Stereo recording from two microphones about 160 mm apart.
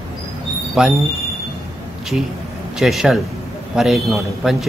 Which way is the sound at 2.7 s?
5° right (ahead or behind).